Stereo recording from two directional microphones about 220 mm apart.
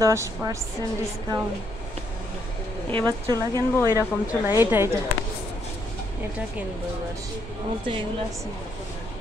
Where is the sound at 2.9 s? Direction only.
20° right (ahead or behind).